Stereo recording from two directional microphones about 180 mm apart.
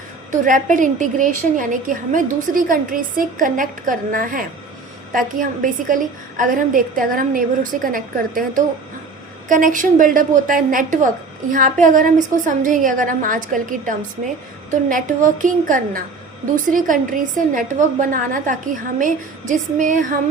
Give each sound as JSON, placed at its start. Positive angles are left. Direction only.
{"t": 0.3, "sound": "a woman's voice", "side_deg": -45}